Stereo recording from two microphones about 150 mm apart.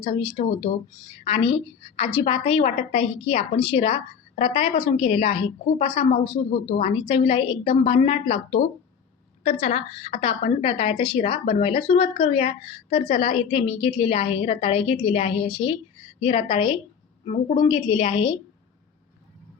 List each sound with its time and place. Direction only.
0.0 s speech: 35° left (ahead or behind)